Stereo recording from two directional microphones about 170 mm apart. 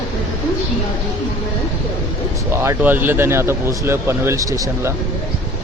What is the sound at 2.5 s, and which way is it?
Speech, 15° right (ahead or behind).